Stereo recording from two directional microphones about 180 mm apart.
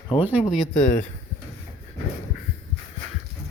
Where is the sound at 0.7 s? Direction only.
45° left (ahead or behind).